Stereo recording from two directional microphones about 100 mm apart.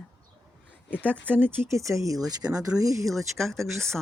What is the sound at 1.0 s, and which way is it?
Speech, 20° right (ahead or behind).